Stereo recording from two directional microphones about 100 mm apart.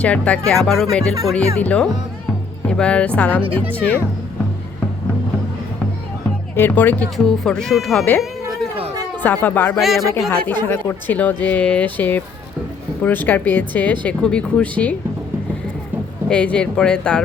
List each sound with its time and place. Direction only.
0.0 s speech: 15° left (ahead or behind)
1.6 s speech: 15° left (ahead or behind)
6.6 s speech: 20° left (ahead or behind); by 8.0 s centre (ahead or behind)
9.2 s speech: 20° left (ahead or behind)
9.7 s speech: centre (ahead or behind)
16.3 s speech: 10° left (ahead or behind)